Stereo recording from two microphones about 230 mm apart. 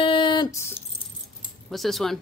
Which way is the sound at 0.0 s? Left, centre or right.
Left.